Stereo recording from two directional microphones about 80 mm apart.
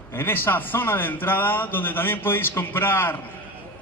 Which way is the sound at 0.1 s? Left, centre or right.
Left.